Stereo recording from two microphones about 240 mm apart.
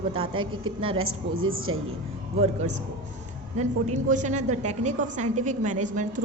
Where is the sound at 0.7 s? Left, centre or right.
Right.